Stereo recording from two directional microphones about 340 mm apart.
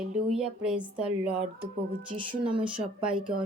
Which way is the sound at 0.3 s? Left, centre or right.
Centre.